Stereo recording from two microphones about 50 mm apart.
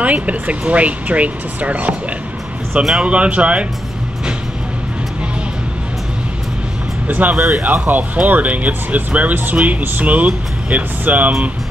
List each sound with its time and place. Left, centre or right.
0.0 s speech: right
7.1 s speech: right
7.3 s speech: centre
7.6 s speech: right